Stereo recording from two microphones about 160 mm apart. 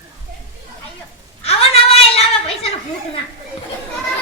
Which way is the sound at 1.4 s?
40° left (ahead or behind).